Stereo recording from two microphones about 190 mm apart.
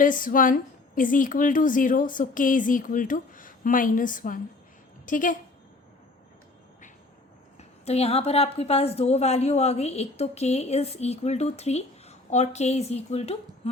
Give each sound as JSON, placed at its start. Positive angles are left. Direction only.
{"t": 0.0, "sound": "a woman's voice", "side_deg": 45}
{"t": 7.9, "sound": "a woman's voice", "side_deg": 35}